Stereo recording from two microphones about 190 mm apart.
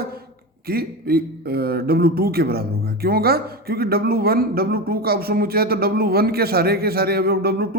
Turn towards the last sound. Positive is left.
turn(degrees=-55)  # may be behind; listen again after turning